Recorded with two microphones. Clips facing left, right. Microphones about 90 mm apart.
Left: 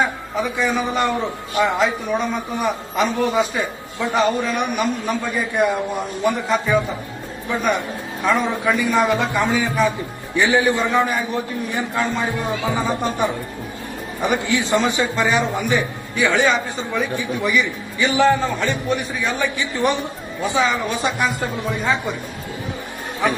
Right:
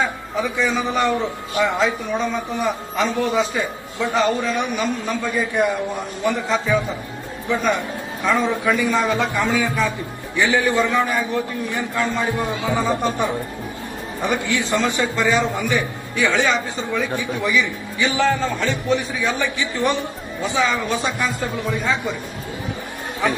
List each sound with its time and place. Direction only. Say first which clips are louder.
0.0 s a man's voice: left 1 dB; 20° left (ahead or behind)
14.2 s a man's voice: left 2 dB; 20° left (ahead or behind)
23.2 s a man's voice: left 1 dB; 20° left (ahead or behind)